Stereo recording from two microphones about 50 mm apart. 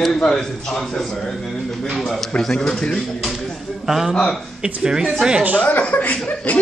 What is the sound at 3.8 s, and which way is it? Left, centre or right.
A man's voice, centre.